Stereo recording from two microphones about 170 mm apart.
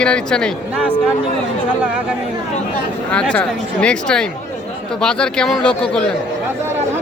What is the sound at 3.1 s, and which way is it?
Speech, 5° left (ahead or behind).